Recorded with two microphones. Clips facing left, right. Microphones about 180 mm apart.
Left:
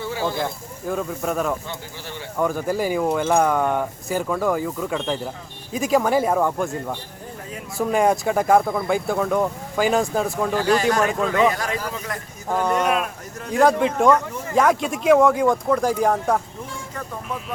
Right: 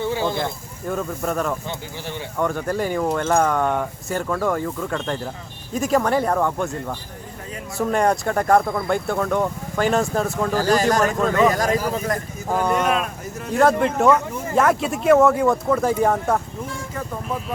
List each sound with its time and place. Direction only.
0.0 s a sound: 20° right (ahead or behind)
0.3 s speech: centre (ahead or behind)
10.5 s speech: 40° right (ahead or behind)
12.5 s speech: centre (ahead or behind)